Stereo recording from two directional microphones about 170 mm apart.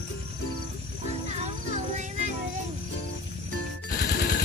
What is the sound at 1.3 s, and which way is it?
Music, 40° right (ahead or behind).